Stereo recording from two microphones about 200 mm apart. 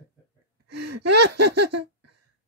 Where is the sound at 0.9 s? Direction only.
55° right (ahead or behind).